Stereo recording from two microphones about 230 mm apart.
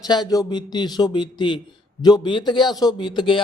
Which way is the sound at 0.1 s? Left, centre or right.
Centre.